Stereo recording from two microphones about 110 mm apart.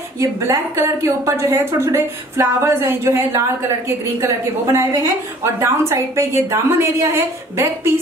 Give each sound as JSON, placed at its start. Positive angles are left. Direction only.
{"t": 0.2, "sound": "a woman's voice", "side_deg": -30}
{"t": 4.7, "sound": "a woman's voice", "side_deg": -30}